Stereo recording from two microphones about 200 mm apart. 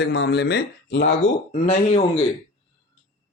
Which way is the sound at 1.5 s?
35° left (ahead or behind).